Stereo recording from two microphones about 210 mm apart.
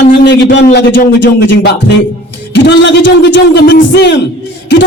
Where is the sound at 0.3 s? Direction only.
55° left (ahead or behind).